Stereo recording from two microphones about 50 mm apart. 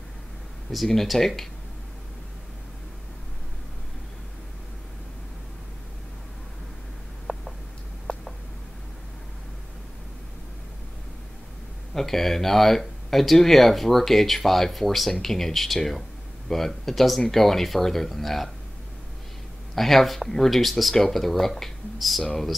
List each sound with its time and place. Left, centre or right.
0.8 s speech: centre
7.3 s a sound: centre
11.9 s speech: centre
19.7 s speech: centre
22.2 s speech: centre